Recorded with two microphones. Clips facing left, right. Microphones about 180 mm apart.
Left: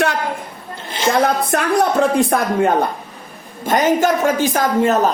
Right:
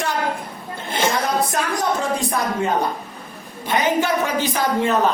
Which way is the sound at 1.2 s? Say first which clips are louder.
Left 4 dB; 60° left (ahead or behind).